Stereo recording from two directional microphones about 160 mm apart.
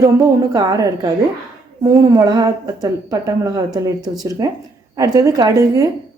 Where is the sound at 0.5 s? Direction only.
20° right (ahead or behind).